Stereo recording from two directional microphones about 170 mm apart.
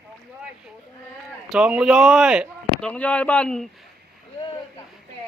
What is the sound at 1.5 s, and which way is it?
A man's voice, 5° right (ahead or behind).